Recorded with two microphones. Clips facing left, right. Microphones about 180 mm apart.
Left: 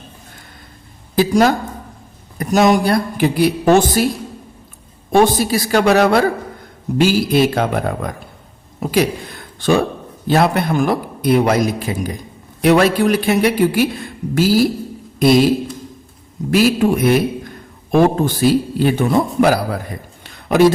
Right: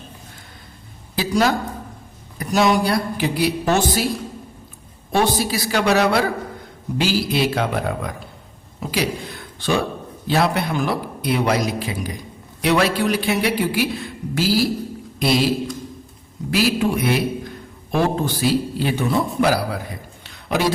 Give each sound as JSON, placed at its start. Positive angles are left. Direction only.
{"t": 1.1, "sound": "a woman's voice", "side_deg": 50}
{"t": 5.1, "sound": "speech", "side_deg": 50}
{"t": 16.5, "sound": "speech", "side_deg": 50}
{"t": 20.2, "sound": "a sound", "side_deg": 50}